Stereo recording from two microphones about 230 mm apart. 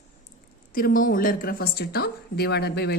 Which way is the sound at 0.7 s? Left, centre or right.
Left.